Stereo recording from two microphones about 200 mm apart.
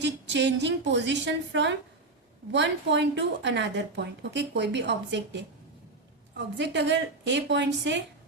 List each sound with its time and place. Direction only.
0.0 s a woman's voice: 60° right (ahead or behind)